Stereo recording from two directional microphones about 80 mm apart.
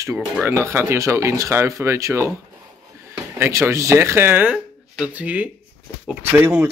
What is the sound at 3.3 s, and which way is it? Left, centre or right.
Speech, right.